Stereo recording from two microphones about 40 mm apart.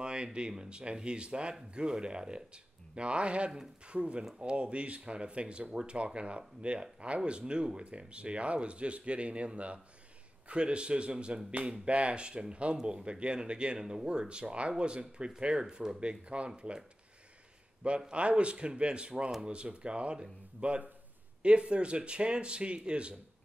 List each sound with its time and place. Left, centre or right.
0.0 s a sound: right
0.5 s speech: right
17.8 s speech: right